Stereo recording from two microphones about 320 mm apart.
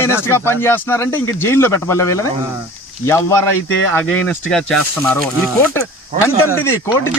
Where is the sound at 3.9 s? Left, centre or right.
Centre.